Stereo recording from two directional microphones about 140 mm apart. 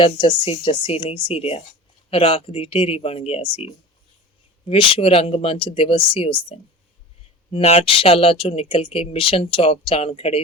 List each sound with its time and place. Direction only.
0.0 s speech: 40° left (ahead or behind)